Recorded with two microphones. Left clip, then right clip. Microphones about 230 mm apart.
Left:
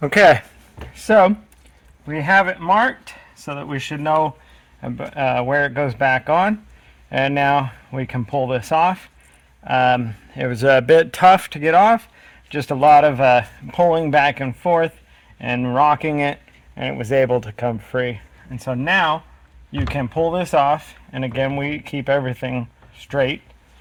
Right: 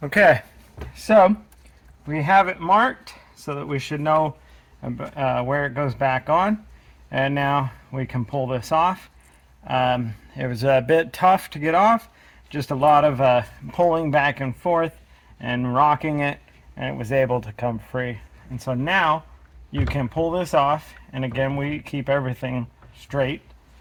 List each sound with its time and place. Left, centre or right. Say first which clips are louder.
0.0 s speech: left 4 dB; left